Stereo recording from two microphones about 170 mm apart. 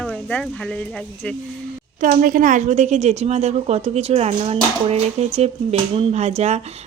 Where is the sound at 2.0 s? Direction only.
55° right (ahead or behind).